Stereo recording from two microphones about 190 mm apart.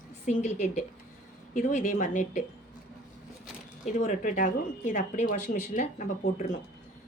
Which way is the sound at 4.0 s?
40° left (ahead or behind).